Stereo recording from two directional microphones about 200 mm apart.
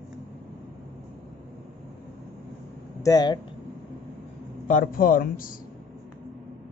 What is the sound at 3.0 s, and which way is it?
Speech, 20° left (ahead or behind).